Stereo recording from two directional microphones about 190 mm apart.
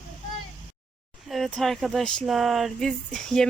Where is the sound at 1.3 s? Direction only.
Centre (ahead or behind).